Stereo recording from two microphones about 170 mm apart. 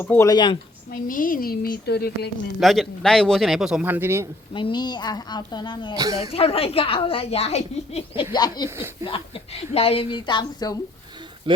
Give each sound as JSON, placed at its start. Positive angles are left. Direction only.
{"t": 0.0, "sound": "a woman's voice", "side_deg": 15}
{"t": 0.3, "sound": "speech", "side_deg": 30}
{"t": 0.9, "sound": "a woman's voice", "side_deg": 55}
{"t": 2.6, "sound": "a man's voice", "side_deg": 0}
{"t": 4.5, "sound": "speech", "side_deg": 25}
{"t": 6.0, "sound": "speech", "side_deg": -20}
{"t": 6.3, "sound": "a woman's voice", "side_deg": 35}
{"t": 8.6, "sound": "speech", "side_deg": -15}
{"t": 9.0, "sound": "a woman's voice", "side_deg": 30}
{"t": 11.5, "sound": "speech", "side_deg": -30}